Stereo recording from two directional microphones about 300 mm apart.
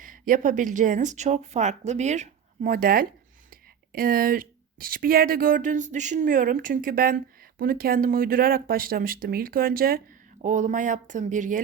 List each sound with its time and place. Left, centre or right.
0.0 s speech: right